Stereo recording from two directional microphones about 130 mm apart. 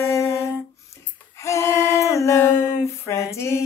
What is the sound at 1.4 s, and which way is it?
Female singing, 20° left (ahead or behind).